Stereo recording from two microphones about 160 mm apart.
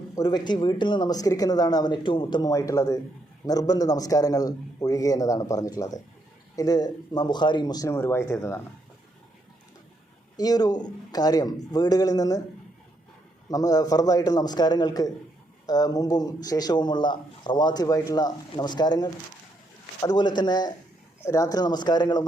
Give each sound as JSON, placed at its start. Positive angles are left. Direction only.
{"t": 0.2, "sound": "a man's voice", "side_deg": 25}
{"t": 10.3, "sound": "a man's voice", "side_deg": 25}
{"t": 13.5, "sound": "a man's voice", "side_deg": 20}